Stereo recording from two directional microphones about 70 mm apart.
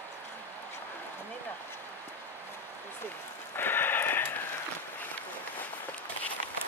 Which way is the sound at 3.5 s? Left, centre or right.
Left.